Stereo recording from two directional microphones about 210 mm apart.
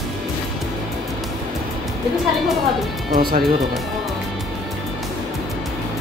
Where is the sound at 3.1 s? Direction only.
45° right (ahead or behind).